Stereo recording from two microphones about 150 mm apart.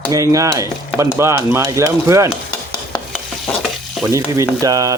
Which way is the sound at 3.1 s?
Centre (ahead or behind).